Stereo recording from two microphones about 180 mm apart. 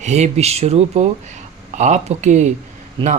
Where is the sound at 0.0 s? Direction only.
35° right (ahead or behind).